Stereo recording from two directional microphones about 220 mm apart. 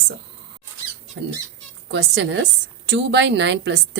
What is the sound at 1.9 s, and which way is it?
A woman's voice, 50° right (ahead or behind).